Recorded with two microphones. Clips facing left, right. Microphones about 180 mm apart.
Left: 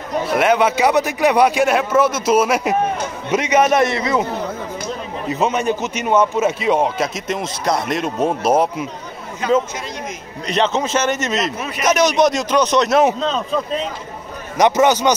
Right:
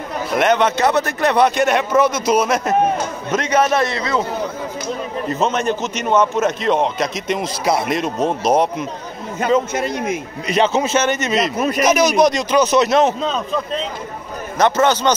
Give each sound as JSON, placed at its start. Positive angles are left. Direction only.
{"t": 0.3, "sound": "a man's voice", "side_deg": 5}
{"t": 5.3, "sound": "a man's voice", "side_deg": 10}
{"t": 9.8, "sound": "a man's voice", "side_deg": -55}
{"t": 10.4, "sound": "a man's voice", "side_deg": -5}
{"t": 11.5, "sound": "a man's voice", "side_deg": -40}
{"t": 11.8, "sound": "a man's voice", "side_deg": 0}
{"t": 14.6, "sound": "a man's voice", "side_deg": 15}